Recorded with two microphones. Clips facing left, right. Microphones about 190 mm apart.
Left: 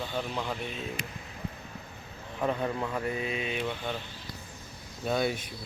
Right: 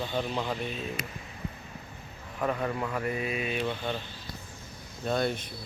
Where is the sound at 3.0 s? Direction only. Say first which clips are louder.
Right 1 dB; 25° left (ahead or behind).